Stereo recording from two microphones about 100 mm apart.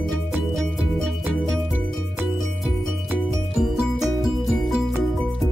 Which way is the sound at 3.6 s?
5° right (ahead or behind).